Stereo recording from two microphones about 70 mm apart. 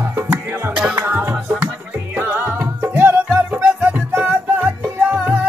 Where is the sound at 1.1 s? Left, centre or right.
Right.